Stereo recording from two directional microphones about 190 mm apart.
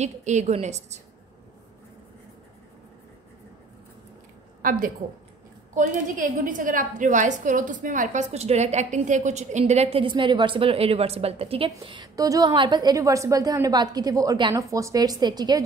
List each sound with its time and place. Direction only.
0.0 s a woman's voice: 40° right (ahead or behind)
4.6 s a woman's voice: 45° right (ahead or behind); by 15.6 s 20° right (ahead or behind)